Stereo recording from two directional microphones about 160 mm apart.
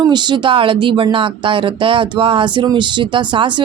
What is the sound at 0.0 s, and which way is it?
Speech, 30° right (ahead or behind).